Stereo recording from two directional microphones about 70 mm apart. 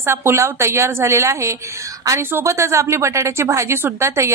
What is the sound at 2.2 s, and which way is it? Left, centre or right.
Speech, right.